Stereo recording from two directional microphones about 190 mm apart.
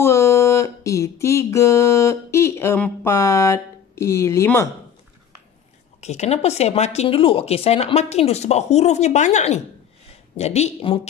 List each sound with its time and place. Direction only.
0.0 s music: 15° left (ahead or behind)
5.9 s speech: 35° left (ahead or behind)